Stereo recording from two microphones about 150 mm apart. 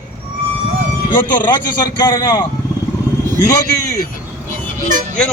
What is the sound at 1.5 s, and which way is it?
A man's voice, 30° left (ahead or behind).